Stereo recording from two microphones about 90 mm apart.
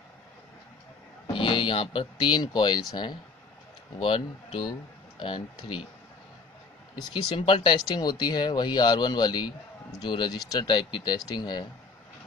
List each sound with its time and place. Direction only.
1.2 s speech: 65° left (ahead or behind); by 3.2 s 50° left (ahead or behind)
4.0 s speech: 85° left
5.2 s speech: 65° left (ahead or behind)
7.2 s speech: 85° left
8.0 s a man's voice: 55° left (ahead or behind)
11.1 s a man's voice: 50° left (ahead or behind)